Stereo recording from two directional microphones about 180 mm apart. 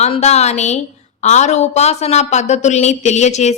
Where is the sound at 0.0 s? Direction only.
40° left (ahead or behind).